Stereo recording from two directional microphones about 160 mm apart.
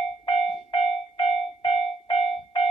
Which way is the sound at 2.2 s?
30° left (ahead or behind).